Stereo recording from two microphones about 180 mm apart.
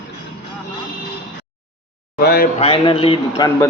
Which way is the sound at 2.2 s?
60° left (ahead or behind).